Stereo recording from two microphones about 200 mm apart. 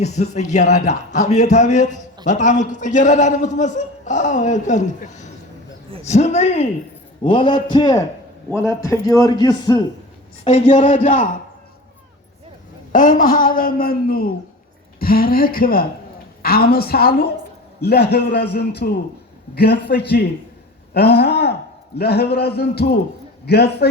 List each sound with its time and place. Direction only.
0.0 s a man's voice: 35° left (ahead or behind)
10.4 s a man's voice: 35° left (ahead or behind)
12.9 s a man's voice: 40° left (ahead or behind)